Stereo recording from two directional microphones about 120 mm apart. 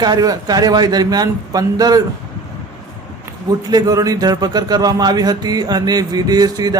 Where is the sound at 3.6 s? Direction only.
35° right (ahead or behind).